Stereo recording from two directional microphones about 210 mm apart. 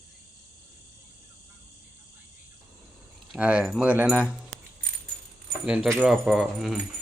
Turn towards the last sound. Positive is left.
turn(degrees=0)  # may be behind; listen again after turning